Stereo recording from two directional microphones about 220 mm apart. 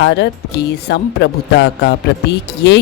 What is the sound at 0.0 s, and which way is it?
Speech, 55° left (ahead or behind).